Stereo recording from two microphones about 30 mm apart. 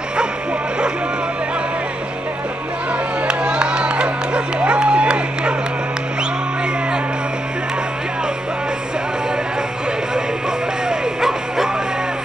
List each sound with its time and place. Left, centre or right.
3.3 s music: right
11.1 s music: centre